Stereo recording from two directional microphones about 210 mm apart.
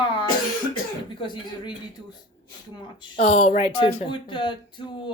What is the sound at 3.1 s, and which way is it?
Speech, 35° left (ahead or behind).